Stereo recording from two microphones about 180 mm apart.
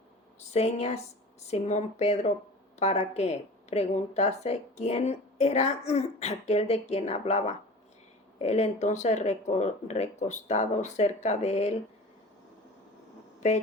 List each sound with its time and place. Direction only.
0.5 s a woman's voice: 35° left (ahead or behind)